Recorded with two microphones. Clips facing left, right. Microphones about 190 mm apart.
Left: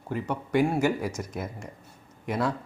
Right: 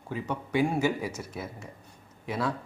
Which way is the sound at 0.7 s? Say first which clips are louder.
Left 2 dB; 10° left (ahead or behind).